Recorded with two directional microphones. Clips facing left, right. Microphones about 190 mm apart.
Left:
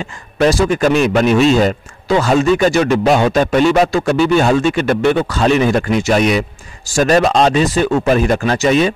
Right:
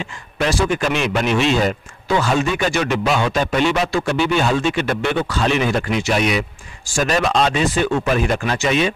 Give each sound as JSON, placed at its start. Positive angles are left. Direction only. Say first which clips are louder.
{"t": 0.0, "sound": "a man's voice", "louder": "left 8 dB", "side_deg": 40}